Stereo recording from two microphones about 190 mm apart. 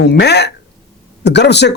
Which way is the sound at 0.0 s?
60° left (ahead or behind).